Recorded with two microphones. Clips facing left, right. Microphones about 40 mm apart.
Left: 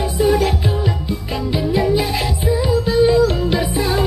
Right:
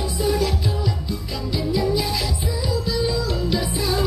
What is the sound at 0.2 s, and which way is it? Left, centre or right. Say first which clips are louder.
Music: left 6 dB; left.